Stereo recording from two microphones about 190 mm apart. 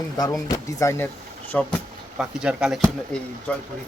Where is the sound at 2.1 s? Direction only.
5° right (ahead or behind).